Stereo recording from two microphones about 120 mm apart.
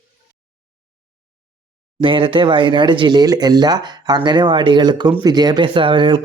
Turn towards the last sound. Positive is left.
turn(degrees=-45)  # may be behind; listen again after turning